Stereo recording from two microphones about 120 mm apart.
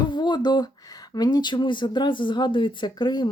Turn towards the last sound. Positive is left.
turn(degrees=35)  # may be behind; listen again after turning